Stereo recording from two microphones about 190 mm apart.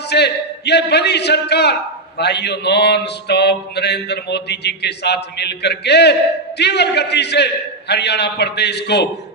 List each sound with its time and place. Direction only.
0.1 s mantra: 60° left (ahead or behind)